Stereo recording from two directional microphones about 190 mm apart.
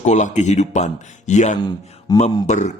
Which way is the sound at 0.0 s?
40° left (ahead or behind).